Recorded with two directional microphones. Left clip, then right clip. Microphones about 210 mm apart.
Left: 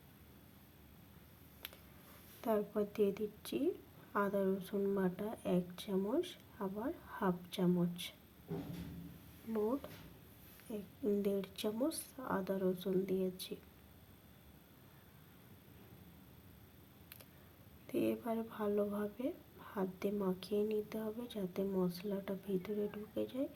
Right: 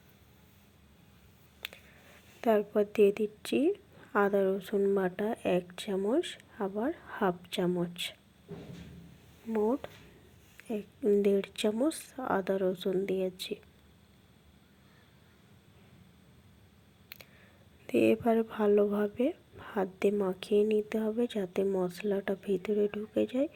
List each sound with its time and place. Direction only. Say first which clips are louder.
2.4 s speech: right 9 dB; 20° right (ahead or behind)
9.5 s speech: right 8 dB; 20° right (ahead or behind)
17.8 s speech: right 11 dB; 25° right (ahead or behind)